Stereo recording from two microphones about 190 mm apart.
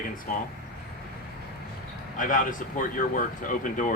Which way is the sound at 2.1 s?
45° left (ahead or behind).